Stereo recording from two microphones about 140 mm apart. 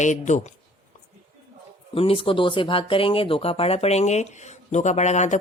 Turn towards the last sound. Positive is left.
turn(degrees=55)  # may be behind; listen again after turning